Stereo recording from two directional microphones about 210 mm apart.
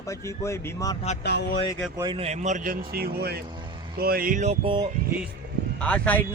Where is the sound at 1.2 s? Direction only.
55° left (ahead or behind).